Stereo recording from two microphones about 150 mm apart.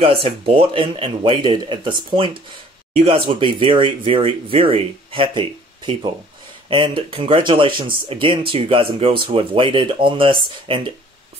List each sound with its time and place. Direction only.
0.0 s speech: 35° right (ahead or behind)